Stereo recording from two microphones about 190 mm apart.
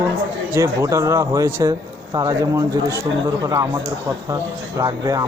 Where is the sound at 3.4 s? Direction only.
20° right (ahead or behind).